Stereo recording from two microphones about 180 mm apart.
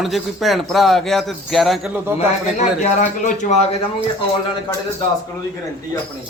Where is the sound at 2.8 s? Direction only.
40° left (ahead or behind).